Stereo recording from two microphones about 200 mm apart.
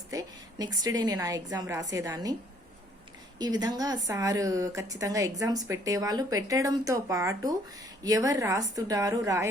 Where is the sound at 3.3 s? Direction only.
20° right (ahead or behind).